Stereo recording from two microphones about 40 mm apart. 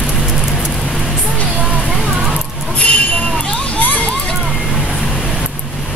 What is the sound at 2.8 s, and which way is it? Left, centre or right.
Vehicle, left.